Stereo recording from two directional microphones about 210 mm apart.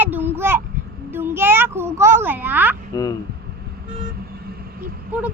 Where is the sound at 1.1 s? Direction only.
10° right (ahead or behind).